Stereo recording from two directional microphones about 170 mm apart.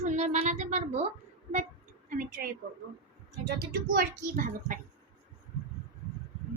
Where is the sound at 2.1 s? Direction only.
55° right (ahead or behind).